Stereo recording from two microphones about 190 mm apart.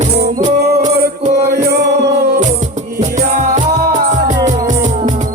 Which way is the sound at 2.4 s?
40° right (ahead or behind).